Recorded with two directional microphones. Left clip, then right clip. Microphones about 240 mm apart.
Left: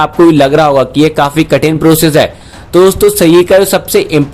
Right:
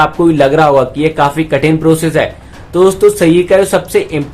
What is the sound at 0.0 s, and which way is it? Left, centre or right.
Speech, left.